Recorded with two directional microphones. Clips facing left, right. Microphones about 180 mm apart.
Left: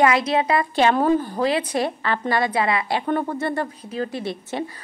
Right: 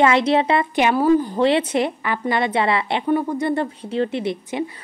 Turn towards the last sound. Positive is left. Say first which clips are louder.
# right 4 dB
turn(degrees=-20)  # may be behind; listen again after turning